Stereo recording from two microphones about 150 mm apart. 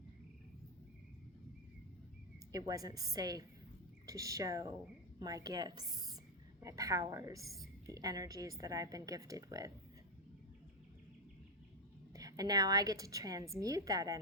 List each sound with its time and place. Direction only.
2.5 s a woman's voice: 25° right (ahead or behind)
12.1 s a woman's voice: 25° right (ahead or behind)